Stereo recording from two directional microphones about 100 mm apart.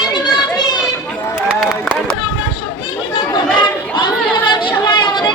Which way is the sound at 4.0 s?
50° left (ahead or behind).